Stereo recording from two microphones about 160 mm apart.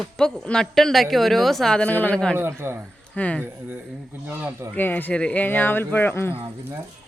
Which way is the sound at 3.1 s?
10° left (ahead or behind).